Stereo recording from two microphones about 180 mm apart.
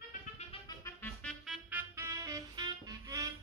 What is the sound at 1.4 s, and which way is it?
Music, 5° right (ahead or behind).